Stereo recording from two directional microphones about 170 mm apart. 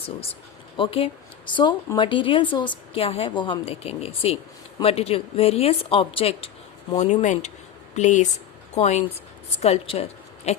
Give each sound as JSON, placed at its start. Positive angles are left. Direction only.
{"t": 0.8, "sound": "a woman's voice", "side_deg": 35}